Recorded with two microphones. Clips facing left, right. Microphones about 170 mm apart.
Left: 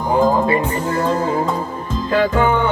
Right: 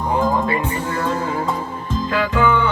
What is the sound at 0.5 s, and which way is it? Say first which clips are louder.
Music: left 4 dB; 40° left (ahead or behind).